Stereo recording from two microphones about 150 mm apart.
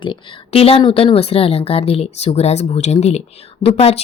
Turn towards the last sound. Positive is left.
turn(degrees=40)  # may be behind; listen again after turning